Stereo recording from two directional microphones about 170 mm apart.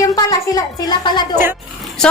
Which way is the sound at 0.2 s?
25° left (ahead or behind).